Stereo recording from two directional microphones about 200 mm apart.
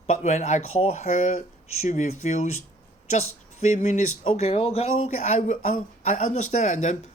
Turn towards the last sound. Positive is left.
turn(degrees=35)  # may be behind; listen again after turning